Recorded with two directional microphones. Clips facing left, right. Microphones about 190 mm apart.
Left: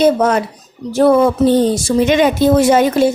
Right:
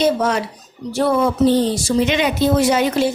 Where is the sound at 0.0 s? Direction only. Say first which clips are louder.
Left 5 dB; 55° left (ahead or behind).